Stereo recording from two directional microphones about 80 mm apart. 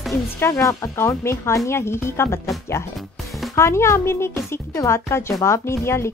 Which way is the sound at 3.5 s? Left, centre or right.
Left.